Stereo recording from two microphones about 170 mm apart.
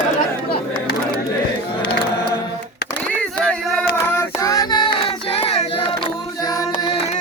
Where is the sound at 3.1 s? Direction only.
5° left (ahead or behind).